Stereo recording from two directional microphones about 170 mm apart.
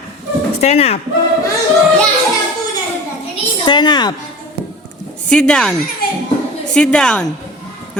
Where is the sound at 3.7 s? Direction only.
25° left (ahead or behind).